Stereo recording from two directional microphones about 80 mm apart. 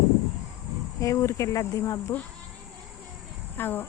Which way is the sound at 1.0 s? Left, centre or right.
Left.